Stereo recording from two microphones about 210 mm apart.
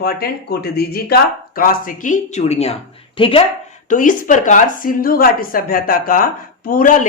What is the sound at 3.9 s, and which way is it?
A woman's voice, 40° left (ahead or behind).